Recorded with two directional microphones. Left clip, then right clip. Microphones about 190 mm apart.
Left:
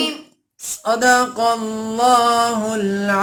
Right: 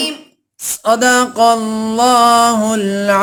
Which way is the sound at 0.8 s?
45° right (ahead or behind).